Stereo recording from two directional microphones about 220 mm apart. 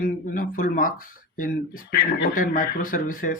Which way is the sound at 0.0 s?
40° left (ahead or behind).